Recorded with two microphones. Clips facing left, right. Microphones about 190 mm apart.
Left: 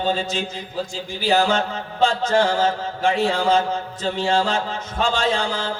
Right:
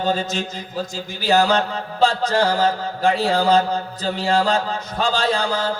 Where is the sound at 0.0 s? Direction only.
40° right (ahead or behind).